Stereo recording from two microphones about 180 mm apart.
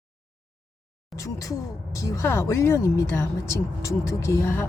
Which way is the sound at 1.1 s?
20° left (ahead or behind).